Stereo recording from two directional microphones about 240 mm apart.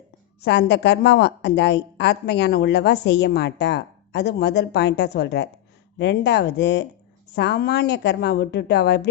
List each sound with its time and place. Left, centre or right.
0.4 s a woman's voice: left